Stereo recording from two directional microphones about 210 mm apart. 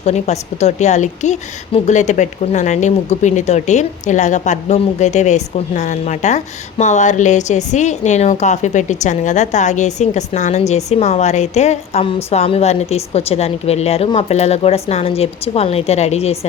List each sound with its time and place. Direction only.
0.0 s a woman's voice: 30° left (ahead or behind)